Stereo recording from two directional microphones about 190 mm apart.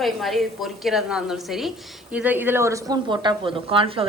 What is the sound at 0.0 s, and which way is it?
A woman's voice, centre (ahead or behind).